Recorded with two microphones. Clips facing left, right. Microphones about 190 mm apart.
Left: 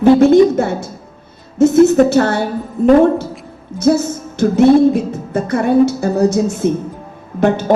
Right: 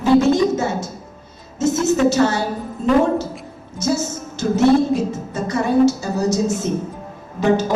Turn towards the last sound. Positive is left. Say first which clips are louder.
# left 4 dB
turn(degrees=55)  # may be behind; listen again after turning